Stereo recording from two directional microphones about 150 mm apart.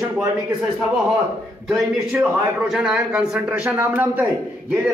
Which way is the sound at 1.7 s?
5° right (ahead or behind).